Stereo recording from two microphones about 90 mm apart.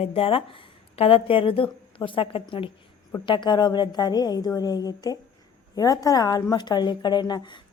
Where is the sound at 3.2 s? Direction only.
60° left (ahead or behind).